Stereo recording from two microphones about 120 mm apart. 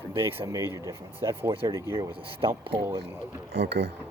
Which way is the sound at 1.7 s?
25° right (ahead or behind).